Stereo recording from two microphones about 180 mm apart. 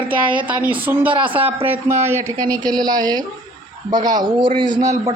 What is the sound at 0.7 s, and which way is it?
Speech, 10° right (ahead or behind).